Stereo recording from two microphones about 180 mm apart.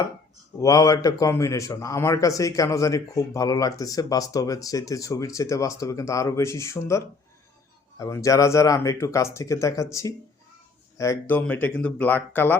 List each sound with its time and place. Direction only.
0.6 s a man's voice: 20° left (ahead or behind)